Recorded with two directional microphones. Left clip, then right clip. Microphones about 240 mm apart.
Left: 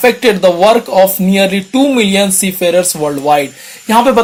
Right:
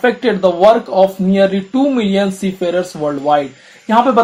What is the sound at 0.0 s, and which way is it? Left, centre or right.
Speech, left.